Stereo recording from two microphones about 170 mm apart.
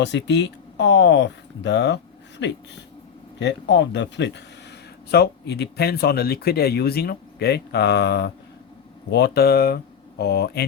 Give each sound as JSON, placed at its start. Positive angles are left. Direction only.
{"t": 0.0, "sound": "speech", "side_deg": 90}